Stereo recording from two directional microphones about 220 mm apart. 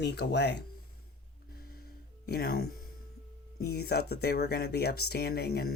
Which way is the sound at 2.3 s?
45° left (ahead or behind).